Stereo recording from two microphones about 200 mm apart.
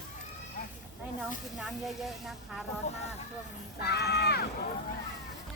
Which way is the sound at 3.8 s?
55° left (ahead or behind).